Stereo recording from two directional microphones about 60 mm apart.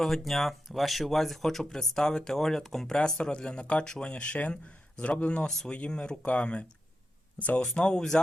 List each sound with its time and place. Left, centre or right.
0.0 s speech: centre